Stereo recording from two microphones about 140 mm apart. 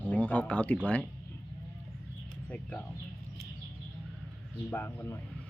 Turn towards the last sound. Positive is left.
turn(degrees=15)  # may be behind; listen again after turning